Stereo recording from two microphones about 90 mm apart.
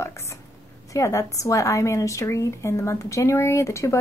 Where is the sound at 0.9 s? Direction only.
35° left (ahead or behind).